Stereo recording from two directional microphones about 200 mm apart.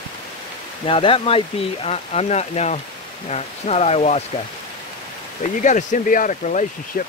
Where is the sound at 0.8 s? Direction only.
25° left (ahead or behind).